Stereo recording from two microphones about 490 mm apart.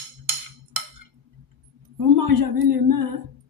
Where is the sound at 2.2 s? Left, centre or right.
Right.